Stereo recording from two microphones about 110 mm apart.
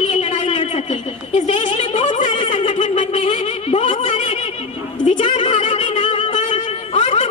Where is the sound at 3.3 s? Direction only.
60° left (ahead or behind).